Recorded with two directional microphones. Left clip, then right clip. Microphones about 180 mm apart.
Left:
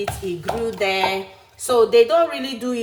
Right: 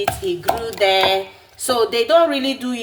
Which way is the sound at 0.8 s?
25° right (ahead or behind).